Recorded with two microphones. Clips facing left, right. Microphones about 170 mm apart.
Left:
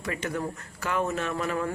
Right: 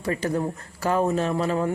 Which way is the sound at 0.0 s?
35° right (ahead or behind).